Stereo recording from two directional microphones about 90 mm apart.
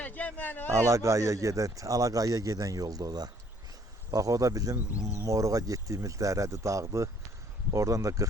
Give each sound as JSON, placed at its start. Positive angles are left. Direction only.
{"t": 0.0, "sound": "a man's voice", "side_deg": 15}
{"t": 0.7, "sound": "speech", "side_deg": -35}